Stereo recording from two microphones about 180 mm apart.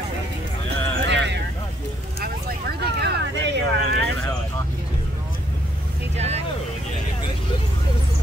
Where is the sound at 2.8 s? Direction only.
65° right (ahead or behind).